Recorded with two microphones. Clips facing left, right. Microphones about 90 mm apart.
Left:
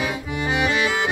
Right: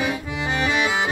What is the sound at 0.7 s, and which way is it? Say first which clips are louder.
Accordion: even; 10° right (ahead or behind).